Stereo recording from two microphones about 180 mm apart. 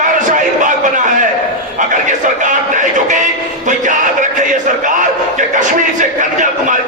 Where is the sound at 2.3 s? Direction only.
45° right (ahead or behind).